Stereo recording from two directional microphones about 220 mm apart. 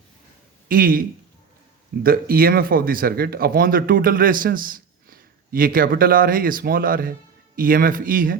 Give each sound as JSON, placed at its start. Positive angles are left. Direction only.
{"t": 0.7, "sound": "speech", "side_deg": -40}
{"t": 2.0, "sound": "speech", "side_deg": -40}